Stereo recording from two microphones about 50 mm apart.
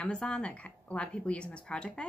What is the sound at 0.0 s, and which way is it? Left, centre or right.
A woman's voice, left.